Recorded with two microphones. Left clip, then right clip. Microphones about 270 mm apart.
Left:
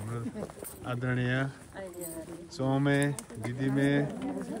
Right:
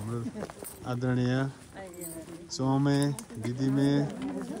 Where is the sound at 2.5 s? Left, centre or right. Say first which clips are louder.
Even; centre.